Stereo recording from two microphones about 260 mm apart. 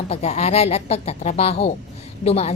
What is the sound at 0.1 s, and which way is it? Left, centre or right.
A woman's voice, left.